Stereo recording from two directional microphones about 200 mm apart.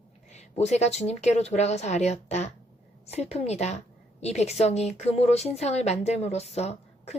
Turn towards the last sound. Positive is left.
turn(degrees=30)  # may be behind; listen again after turning